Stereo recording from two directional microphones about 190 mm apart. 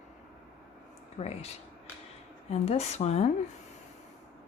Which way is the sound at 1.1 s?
35° left (ahead or behind).